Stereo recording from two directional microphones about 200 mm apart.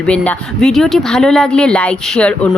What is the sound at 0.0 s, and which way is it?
Speech, 5° left (ahead or behind).